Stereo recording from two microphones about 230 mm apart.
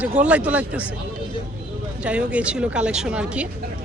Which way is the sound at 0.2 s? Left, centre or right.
Centre.